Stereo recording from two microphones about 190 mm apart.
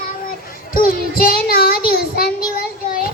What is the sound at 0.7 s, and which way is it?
Child singing, 50° left (ahead or behind).